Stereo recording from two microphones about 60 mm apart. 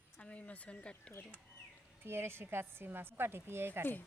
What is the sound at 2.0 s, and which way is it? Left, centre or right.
A woman's voice, right.